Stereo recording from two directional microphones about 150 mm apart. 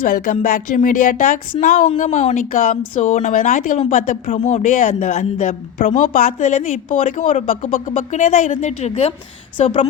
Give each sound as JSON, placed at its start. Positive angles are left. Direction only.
{"t": 0.0, "sound": "a woman's voice", "side_deg": 65}